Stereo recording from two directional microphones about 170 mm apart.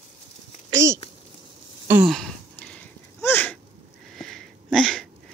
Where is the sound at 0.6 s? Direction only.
15° right (ahead or behind).